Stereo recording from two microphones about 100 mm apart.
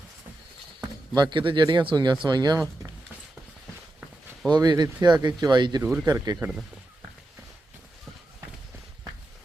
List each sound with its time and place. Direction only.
0.8 s speech: 45° right (ahead or behind)
4.4 s speech: 45° right (ahead or behind)
6.1 s speech: 35° right (ahead or behind)